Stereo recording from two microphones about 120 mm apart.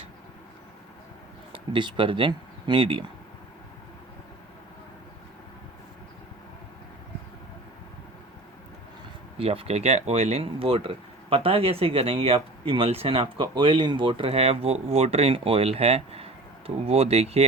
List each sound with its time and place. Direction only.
1.5 s speech: 45° right (ahead or behind)
9.4 s speech: 50° right (ahead or behind)